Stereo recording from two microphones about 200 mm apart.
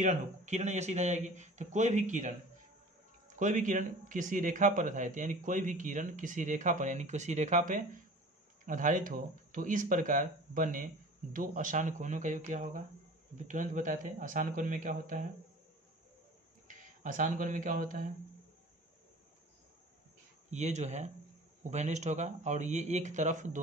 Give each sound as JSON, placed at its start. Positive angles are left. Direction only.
{"t": 0.0, "sound": "a man's voice", "side_deg": -40}
{"t": 3.3, "sound": "a man's voice", "side_deg": -40}
{"t": 16.6, "sound": "speech", "side_deg": -40}
{"t": 20.4, "sound": "a man's voice", "side_deg": -35}